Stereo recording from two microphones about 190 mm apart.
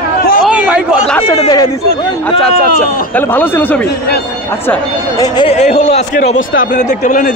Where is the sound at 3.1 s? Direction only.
10° left (ahead or behind).